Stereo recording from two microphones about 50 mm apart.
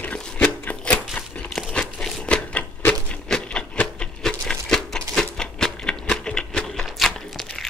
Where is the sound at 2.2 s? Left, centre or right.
Left.